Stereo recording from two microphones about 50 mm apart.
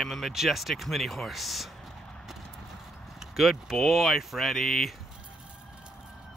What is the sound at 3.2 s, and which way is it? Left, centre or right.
Speech, centre.